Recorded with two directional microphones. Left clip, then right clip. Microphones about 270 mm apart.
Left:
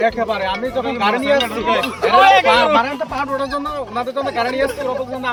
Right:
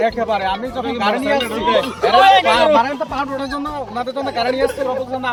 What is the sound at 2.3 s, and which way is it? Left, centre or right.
Speech, centre.